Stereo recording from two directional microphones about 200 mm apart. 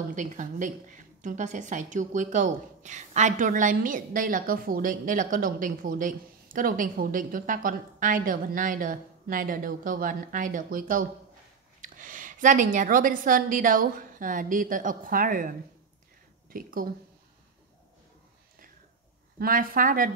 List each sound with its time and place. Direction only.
0.1 s a woman's voice: 40° right (ahead or behind)
19.3 s a woman's voice: 45° right (ahead or behind)